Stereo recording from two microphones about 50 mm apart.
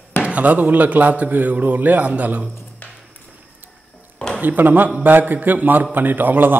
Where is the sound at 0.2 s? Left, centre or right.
Right.